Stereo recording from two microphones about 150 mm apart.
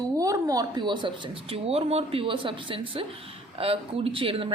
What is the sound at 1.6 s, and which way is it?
Speech, 40° right (ahead or behind).